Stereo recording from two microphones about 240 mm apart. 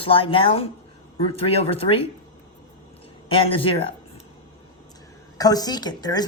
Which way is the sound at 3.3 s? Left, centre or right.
Left.